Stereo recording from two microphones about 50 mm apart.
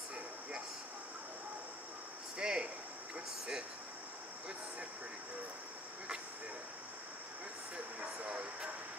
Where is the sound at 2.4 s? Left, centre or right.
Centre.